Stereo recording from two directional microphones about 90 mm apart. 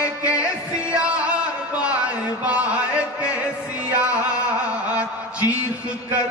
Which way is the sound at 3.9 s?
15° right (ahead or behind).